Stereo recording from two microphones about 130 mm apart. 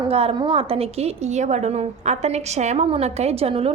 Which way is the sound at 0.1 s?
50° right (ahead or behind).